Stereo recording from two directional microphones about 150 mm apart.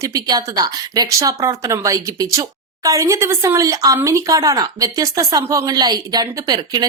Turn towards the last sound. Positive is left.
turn(degrees=-25)  # may be behind; listen again after turning